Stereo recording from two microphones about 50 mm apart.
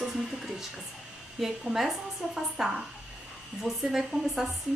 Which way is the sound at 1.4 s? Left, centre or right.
Centre.